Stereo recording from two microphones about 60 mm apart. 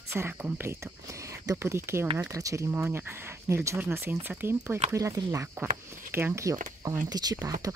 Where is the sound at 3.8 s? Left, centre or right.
Right.